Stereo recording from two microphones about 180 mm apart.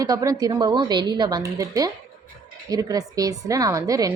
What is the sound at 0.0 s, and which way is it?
A woman's voice, 20° right (ahead or behind).